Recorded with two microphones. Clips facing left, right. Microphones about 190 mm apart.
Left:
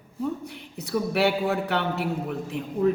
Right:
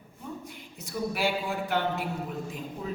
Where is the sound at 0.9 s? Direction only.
65° left (ahead or behind).